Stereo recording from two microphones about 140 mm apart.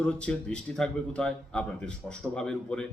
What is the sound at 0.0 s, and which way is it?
A man's voice, 10° left (ahead or behind).